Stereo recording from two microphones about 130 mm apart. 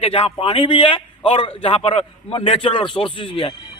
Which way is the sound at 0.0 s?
45° left (ahead or behind).